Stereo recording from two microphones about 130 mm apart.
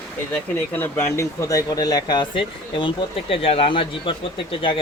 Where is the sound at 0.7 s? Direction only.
15° left (ahead or behind); by 4.1 s 40° left (ahead or behind).